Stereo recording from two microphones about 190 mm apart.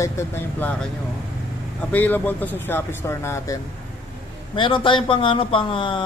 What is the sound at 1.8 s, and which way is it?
A man's voice, 10° left (ahead or behind).